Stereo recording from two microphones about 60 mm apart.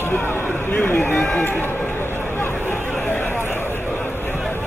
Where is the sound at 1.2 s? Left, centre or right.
Centre.